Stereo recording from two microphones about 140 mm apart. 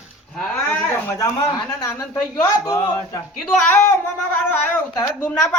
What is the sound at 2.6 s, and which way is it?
Speech, 25° left (ahead or behind).